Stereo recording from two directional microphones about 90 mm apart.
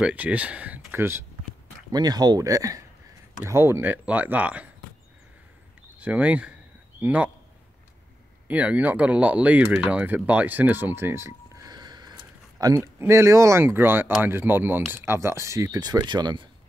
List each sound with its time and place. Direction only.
0.0 s speech: 15° right (ahead or behind)
1.9 s speech: 45° right (ahead or behind)
3.4 s speech: 30° right (ahead or behind)
5.9 s a man's voice: 15° right (ahead or behind)
8.5 s speech: 15° right (ahead or behind)
11.6 s a sound: 50° right (ahead or behind)
12.7 s speech: 30° right (ahead or behind)
15.8 s speech: 50° right (ahead or behind)